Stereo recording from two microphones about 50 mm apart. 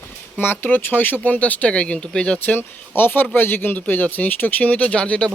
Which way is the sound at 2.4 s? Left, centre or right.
Left.